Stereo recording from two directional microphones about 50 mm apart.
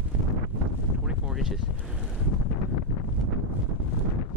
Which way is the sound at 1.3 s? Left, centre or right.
Centre.